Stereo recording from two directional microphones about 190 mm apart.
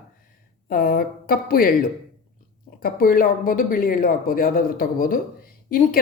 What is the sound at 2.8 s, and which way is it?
Speech, 50° left (ahead or behind).